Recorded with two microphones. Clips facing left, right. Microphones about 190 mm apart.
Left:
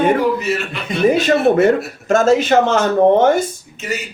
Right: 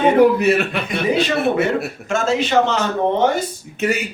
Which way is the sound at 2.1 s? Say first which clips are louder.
Left 7 dB; 40° left (ahead or behind).